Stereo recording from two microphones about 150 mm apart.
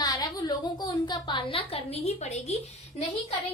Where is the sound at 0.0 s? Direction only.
25° left (ahead or behind); by 2.6 s 45° left (ahead or behind).